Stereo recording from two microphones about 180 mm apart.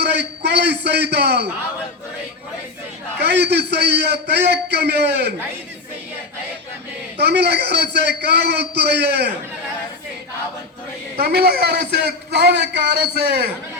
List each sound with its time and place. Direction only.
0.0 s a sound: 70° right (ahead or behind)
3.2 s a man's voice: 65° right (ahead or behind)
7.2 s a man's voice: 65° right (ahead or behind)
11.2 s a man's voice: 60° right (ahead or behind)